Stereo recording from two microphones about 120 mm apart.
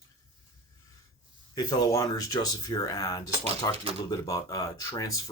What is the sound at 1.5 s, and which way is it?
Speech, 30° left (ahead or behind).